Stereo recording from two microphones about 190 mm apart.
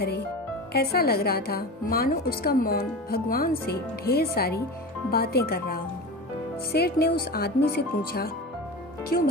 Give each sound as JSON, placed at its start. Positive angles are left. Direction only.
{"t": 0.7, "sound": "a woman's voice", "side_deg": 55}